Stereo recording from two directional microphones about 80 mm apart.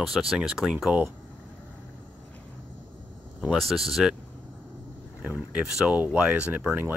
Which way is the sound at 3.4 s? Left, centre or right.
Centre.